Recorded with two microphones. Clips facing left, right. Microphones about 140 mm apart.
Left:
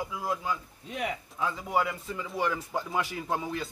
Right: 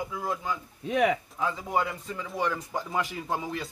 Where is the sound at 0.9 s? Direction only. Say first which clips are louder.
Right 9 dB; 90° right.